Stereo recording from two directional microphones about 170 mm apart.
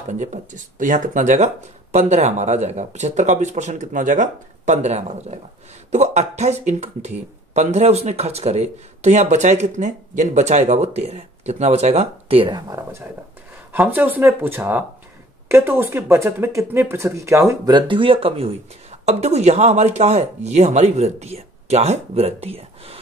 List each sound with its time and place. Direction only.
0.2 s speech: 45° right (ahead or behind)